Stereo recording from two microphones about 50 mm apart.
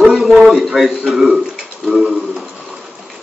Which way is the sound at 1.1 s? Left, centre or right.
Centre.